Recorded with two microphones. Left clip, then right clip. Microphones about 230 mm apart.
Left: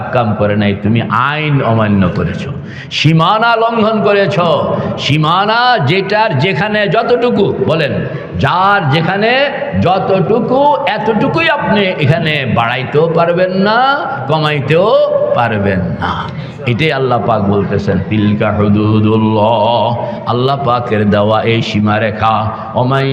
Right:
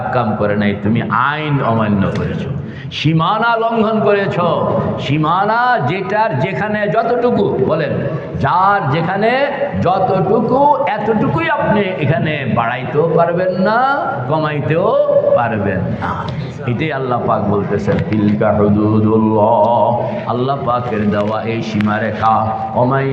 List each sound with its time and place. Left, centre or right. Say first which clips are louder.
0.1 s a man's voice: left 4 dB; left
16.8 s a man's voice: left 5 dB; left